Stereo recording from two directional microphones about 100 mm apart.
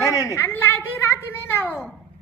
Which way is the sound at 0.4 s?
20° left (ahead or behind).